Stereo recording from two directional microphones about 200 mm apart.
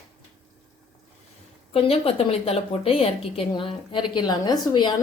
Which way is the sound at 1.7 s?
30° left (ahead or behind).